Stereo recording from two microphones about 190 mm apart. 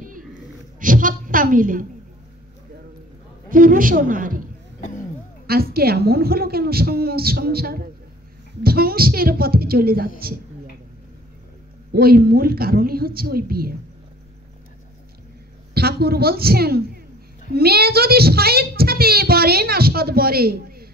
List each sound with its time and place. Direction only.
0.7 s a woman's voice: 45° right (ahead or behind)
3.4 s a man's voice: 45° right (ahead or behind)
5.5 s a woman's voice: 55° right (ahead or behind)
11.9 s a woman's voice: 55° right (ahead or behind)
15.7 s a woman's voice: 55° right (ahead or behind)